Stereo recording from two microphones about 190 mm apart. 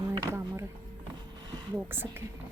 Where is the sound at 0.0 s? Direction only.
20° right (ahead or behind).